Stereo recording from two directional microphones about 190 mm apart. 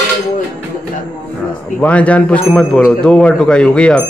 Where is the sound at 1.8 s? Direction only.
5° left (ahead or behind).